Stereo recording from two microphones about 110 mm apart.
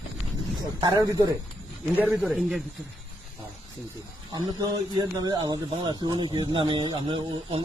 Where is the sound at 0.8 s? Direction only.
35° right (ahead or behind).